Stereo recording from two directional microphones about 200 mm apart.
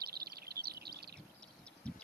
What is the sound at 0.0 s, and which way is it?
Bird, 50° right (ahead or behind).